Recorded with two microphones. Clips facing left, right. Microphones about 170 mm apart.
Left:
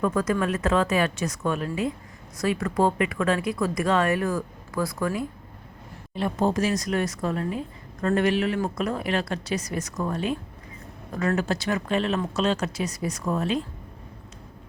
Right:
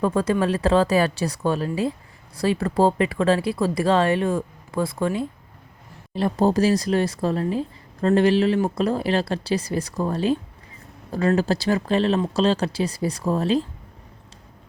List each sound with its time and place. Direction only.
0.0 s speech: 30° right (ahead or behind)